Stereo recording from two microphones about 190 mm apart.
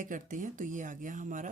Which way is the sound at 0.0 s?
45° right (ahead or behind).